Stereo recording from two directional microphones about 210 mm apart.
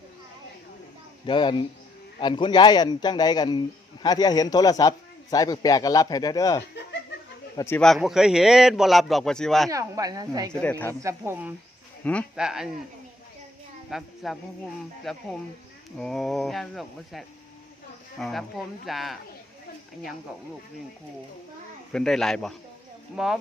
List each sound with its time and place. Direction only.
1.3 s a man's voice: 20° left (ahead or behind); by 9.6 s centre (ahead or behind)
9.6 s a woman's voice: 15° right (ahead or behind)
10.5 s a man's voice: 10° left (ahead or behind)
11.0 s a woman's voice: 10° right (ahead or behind)
12.0 s a man's voice: centre (ahead or behind)
13.9 s a man's voice: centre (ahead or behind)
21.9 s a man's voice: centre (ahead or behind)